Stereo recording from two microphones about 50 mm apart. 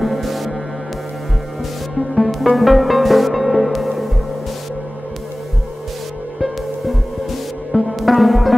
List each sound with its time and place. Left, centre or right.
0.0 s music: centre
2.0 s music: centre
6.4 s music: centre